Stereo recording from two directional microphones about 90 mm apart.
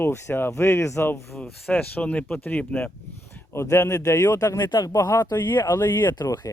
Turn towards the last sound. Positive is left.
turn(degrees=45)  # may be behind; listen again after turning